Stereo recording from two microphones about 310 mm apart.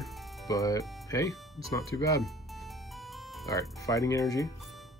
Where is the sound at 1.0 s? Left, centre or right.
Centre.